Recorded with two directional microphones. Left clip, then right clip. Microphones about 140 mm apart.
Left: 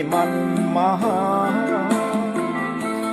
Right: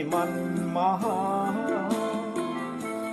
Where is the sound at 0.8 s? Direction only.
50° left (ahead or behind).